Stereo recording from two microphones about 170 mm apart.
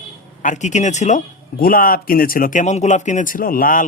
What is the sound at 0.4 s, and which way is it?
Speech, 45° left (ahead or behind).